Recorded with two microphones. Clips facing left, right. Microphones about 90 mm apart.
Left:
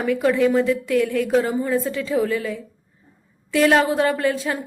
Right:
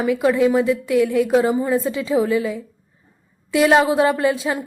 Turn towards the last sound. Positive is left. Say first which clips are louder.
# right 2 dB
turn(degrees=-10)  # may be behind; listen again after turning